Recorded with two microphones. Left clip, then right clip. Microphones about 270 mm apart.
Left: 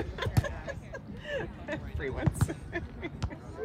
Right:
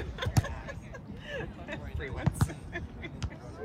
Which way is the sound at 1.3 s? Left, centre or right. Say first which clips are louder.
Left 4 dB; left.